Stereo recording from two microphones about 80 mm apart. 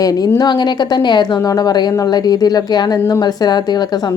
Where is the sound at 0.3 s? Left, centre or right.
Left.